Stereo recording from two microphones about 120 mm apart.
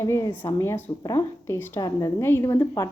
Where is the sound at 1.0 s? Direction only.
30° left (ahead or behind).